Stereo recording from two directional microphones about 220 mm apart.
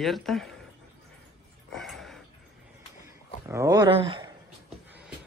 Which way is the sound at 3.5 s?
15° right (ahead or behind).